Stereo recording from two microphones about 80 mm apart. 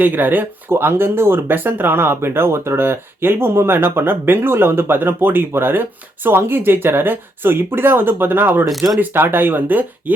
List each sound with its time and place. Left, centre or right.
0.0 s speech: right
8.7 s speech: centre
9.0 s speech: right